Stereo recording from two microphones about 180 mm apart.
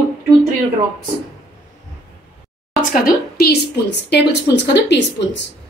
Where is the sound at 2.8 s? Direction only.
45° left (ahead or behind); by 5.4 s 70° left (ahead or behind).